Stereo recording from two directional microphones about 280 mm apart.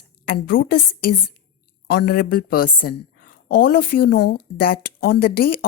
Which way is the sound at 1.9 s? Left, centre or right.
Left.